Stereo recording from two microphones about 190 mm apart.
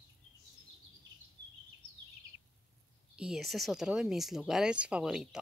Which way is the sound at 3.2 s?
Centre (ahead or behind).